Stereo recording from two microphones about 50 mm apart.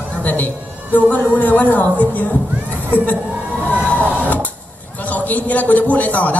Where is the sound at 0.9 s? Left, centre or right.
Left.